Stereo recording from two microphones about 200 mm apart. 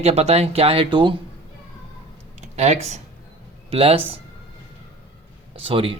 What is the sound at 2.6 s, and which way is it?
Speech, 35° right (ahead or behind).